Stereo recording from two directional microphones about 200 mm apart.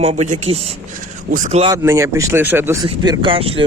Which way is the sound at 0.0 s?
30° right (ahead or behind).